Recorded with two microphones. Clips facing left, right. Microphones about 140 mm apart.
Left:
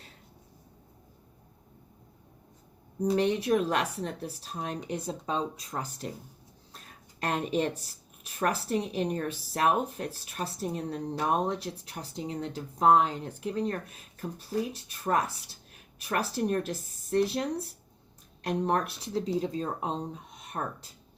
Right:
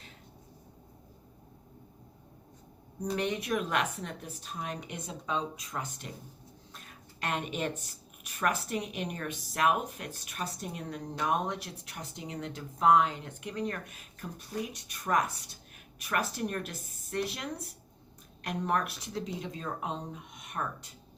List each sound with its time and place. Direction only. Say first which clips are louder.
3.0 s a woman's voice: left 6 dB; 30° left (ahead or behind)
6.7 s a sound: left 4 dB; 35° left (ahead or behind)
7.8 s a woman's voice: right 2 dB; 35° left (ahead or behind)